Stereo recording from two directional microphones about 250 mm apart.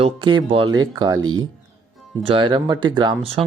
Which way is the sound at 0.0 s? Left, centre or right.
Centre.